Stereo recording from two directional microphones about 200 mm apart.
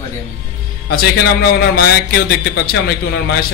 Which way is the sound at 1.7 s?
55° left (ahead or behind).